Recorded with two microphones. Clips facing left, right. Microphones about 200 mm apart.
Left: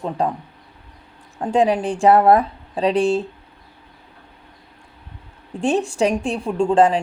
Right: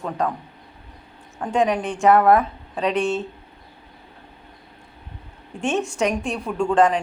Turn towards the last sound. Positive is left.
turn(degrees=30)  # may be behind; listen again after turning